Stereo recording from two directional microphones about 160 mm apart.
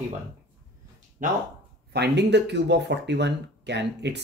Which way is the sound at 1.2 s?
55° right (ahead or behind).